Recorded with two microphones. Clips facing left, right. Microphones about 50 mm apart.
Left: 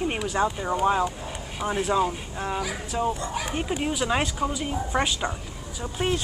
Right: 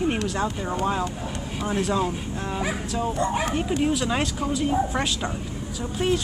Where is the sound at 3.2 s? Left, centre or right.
Right.